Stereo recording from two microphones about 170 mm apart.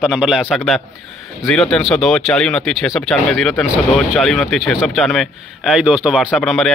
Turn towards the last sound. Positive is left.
turn(degrees=0)  # may be behind; listen again after turning